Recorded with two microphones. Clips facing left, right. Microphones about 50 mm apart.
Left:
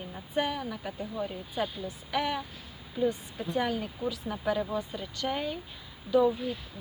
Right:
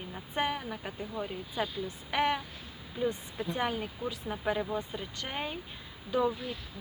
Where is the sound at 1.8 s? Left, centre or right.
Right.